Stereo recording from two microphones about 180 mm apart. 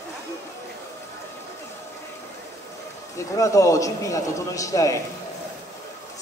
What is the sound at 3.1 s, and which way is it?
A man's voice, 15° left (ahead or behind).